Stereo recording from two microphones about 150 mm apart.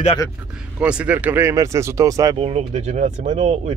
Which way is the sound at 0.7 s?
10° right (ahead or behind).